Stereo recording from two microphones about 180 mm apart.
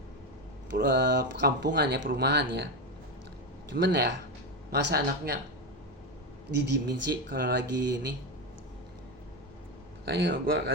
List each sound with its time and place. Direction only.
0.7 s speech: 70° right (ahead or behind)
3.8 s speech: 65° right (ahead or behind)
6.6 s speech: 70° right (ahead or behind)
10.1 s speech: 70° right (ahead or behind)